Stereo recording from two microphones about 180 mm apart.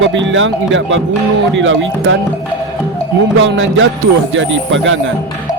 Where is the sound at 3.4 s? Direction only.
90° right.